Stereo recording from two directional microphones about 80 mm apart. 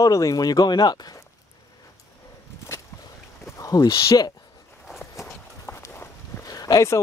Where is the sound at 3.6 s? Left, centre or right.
Left.